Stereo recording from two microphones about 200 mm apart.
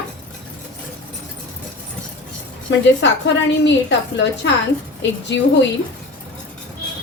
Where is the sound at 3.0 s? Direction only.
65° left (ahead or behind).